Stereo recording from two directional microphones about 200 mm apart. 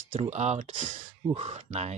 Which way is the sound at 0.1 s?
35° right (ahead or behind).